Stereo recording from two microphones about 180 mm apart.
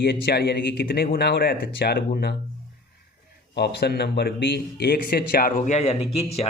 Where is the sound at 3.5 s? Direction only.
65° left (ahead or behind).